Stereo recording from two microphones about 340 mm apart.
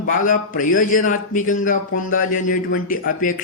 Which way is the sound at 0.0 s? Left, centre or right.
Left.